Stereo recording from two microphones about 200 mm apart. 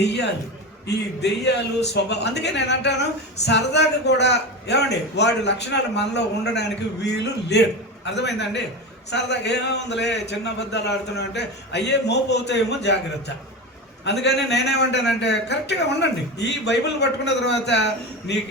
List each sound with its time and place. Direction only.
0.0 s a man's voice: 60° left (ahead or behind)